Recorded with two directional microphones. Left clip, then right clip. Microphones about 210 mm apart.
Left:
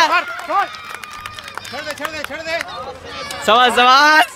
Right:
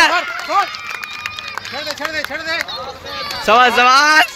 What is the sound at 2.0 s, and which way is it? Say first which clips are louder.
Speech: right 3 dB; 50° left (ahead or behind).